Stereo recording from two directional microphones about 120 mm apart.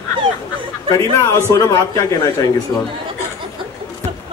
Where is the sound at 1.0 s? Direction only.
25° left (ahead or behind).